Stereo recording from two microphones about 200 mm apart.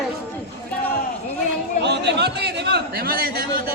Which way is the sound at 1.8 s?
60° right (ahead or behind).